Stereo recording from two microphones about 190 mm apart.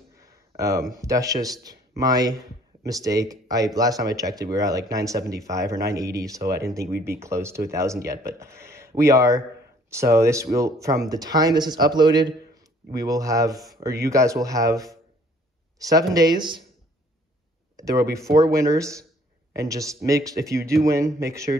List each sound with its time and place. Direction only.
0.2 s a sound: 15° right (ahead or behind)
0.9 s speech: 15° right (ahead or behind)
17.7 s speech: 20° right (ahead or behind)